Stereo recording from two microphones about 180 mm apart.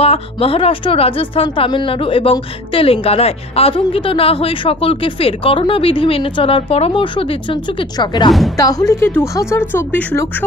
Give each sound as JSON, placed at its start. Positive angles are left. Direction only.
{"t": 0.0, "sound": "a woman's voice", "side_deg": 30}